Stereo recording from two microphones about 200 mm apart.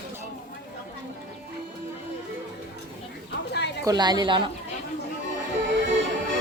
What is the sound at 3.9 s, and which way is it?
Speech, 20° right (ahead or behind).